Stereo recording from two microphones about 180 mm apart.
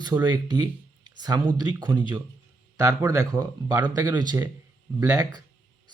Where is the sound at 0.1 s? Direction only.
25° right (ahead or behind).